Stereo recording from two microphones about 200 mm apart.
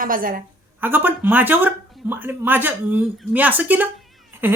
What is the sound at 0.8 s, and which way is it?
Speech, 10° right (ahead or behind).